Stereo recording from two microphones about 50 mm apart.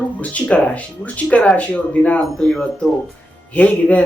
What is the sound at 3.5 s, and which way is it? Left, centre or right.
Speech, left.